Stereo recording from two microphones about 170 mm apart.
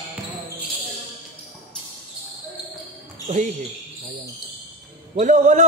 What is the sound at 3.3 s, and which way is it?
Speech, 45° right (ahead or behind).